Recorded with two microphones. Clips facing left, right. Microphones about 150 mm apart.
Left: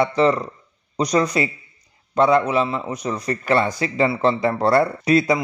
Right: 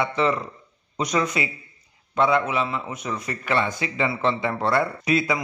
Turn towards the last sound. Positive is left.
turn(degrees=35)  # may be behind; listen again after turning